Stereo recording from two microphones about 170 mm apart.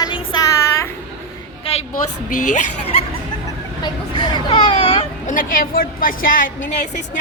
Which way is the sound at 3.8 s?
25° left (ahead or behind).